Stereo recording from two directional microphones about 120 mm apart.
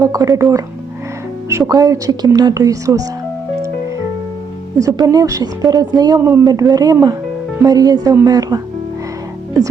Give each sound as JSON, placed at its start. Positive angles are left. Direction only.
{"t": 0.0, "sound": "speech", "side_deg": -30}
{"t": 4.8, "sound": "a woman's voice", "side_deg": -30}
{"t": 6.1, "sound": "a woman's voice", "side_deg": -25}